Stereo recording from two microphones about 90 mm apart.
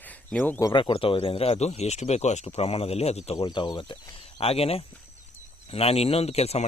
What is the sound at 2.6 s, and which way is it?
Speech, 90° left.